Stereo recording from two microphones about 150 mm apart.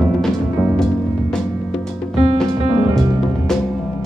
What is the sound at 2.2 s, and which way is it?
Music, 40° right (ahead or behind).